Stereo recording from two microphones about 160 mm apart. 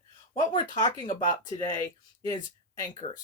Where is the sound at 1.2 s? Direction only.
50° left (ahead or behind).